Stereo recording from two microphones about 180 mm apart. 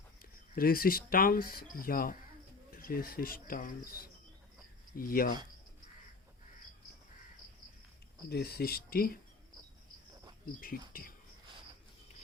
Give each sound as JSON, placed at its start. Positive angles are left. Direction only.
{"t": 0.2, "sound": "speech", "side_deg": 55}
{"t": 4.9, "sound": "speech", "side_deg": 55}
{"t": 8.3, "sound": "speech", "side_deg": 60}
{"t": 10.6, "sound": "speech", "side_deg": 55}